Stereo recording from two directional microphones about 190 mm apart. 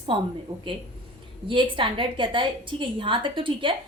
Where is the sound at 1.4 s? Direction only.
25° right (ahead or behind).